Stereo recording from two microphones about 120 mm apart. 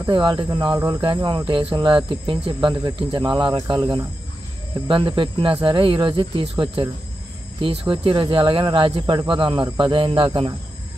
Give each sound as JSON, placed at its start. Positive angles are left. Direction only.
{"t": 0.1, "sound": "speech", "side_deg": -45}
{"t": 0.7, "sound": "speech", "side_deg": -30}
{"t": 1.4, "sound": "speech", "side_deg": -50}
{"t": 3.5, "sound": "speech", "side_deg": -30}
{"t": 4.8, "sound": "speech", "side_deg": -45}
{"t": 7.9, "sound": "speech", "side_deg": -45}